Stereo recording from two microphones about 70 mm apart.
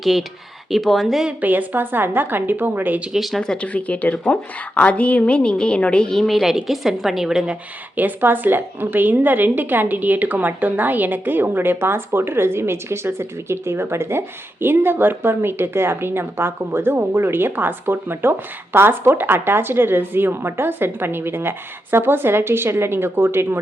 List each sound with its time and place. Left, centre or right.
0.0 s a woman's voice: centre
1.3 s a woman's voice: right
3.1 s a woman's voice: centre
3.4 s a woman's voice: centre
6.1 s a woman's voice: centre
7.9 s a woman's voice: right